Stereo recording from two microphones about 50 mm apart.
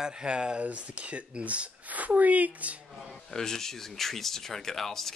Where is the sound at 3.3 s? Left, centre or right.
Centre.